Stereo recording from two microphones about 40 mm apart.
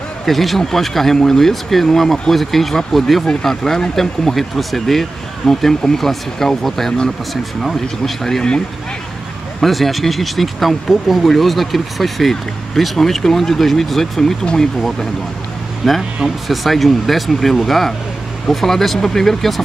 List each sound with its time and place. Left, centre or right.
0.2 s speech: centre
9.6 s speech: centre
14.4 s speech: centre
15.8 s speech: centre